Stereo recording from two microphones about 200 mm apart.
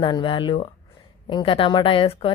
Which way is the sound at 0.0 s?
25° left (ahead or behind).